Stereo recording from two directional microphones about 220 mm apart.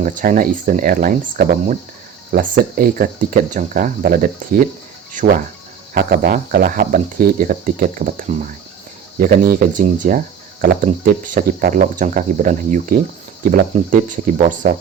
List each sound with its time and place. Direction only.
0.0 s speech: 35° right (ahead or behind)